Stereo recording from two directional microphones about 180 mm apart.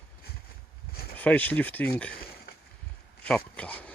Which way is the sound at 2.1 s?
60° left (ahead or behind).